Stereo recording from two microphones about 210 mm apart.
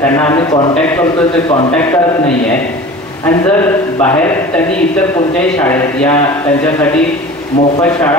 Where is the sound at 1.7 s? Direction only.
10° left (ahead or behind).